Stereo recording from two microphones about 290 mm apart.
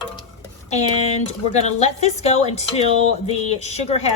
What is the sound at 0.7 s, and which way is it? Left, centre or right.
A woman's voice, left.